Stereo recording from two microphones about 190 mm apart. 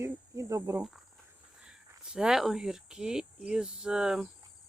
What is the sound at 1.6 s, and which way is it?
Speech, 5° right (ahead or behind).